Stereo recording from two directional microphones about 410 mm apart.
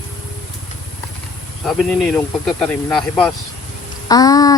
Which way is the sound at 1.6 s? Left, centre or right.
Centre.